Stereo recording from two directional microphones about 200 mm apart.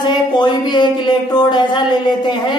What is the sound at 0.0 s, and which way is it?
A man's voice, 20° left (ahead or behind).